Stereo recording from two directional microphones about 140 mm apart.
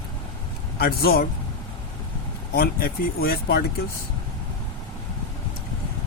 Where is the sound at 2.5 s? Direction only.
90° left.